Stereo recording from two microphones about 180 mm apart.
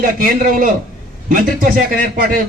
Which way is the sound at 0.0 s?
50° right (ahead or behind).